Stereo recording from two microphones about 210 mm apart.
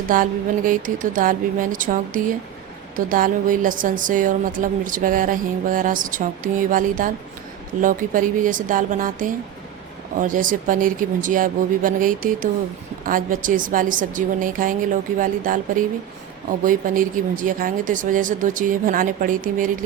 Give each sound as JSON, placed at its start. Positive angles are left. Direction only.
{"t": 0.1, "sound": "a woman's voice", "side_deg": -40}